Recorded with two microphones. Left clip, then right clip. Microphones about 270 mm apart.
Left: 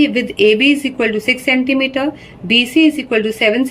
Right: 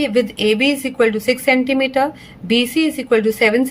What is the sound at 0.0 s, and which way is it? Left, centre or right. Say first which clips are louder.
A woman's voice: left 4 dB; centre.